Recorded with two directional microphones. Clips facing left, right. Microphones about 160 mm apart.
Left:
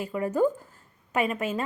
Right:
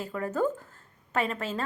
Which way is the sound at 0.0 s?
15° left (ahead or behind).